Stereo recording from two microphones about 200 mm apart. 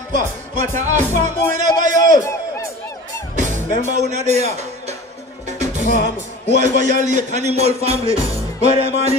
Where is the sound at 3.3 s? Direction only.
40° right (ahead or behind).